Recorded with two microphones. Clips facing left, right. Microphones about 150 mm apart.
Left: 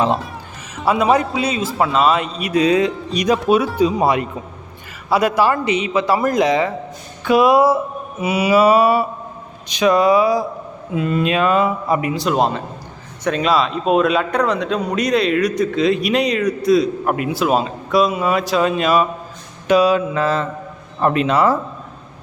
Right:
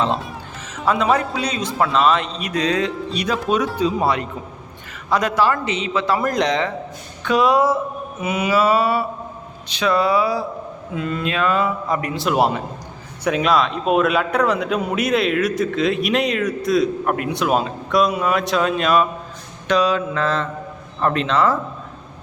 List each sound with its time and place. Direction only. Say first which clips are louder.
1.1 s a man's voice: left 3 dB; 5° left (ahead or behind)
6.2 s a man's voice: left 4 dB; 5° left (ahead or behind)